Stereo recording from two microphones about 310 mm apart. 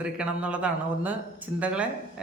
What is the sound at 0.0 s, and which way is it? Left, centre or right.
Speech, centre.